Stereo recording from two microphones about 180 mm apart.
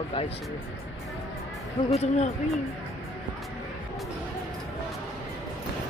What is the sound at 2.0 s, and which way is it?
Speech, 40° left (ahead or behind).